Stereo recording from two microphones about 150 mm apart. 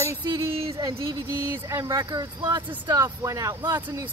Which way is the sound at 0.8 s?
25° right (ahead or behind).